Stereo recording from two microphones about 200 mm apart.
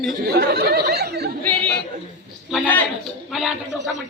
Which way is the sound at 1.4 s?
5° left (ahead or behind).